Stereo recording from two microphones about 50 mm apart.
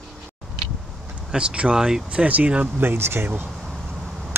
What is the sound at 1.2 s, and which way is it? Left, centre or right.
Speech, centre.